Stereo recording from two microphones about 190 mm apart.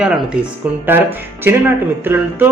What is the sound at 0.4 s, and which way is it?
Speech, 5° right (ahead or behind).